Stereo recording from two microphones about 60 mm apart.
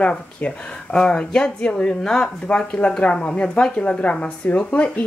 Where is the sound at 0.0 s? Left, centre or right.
Centre.